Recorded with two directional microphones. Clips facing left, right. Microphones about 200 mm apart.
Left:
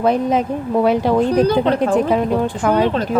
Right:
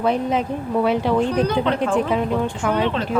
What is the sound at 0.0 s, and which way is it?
A woman's voice, 45° left (ahead or behind).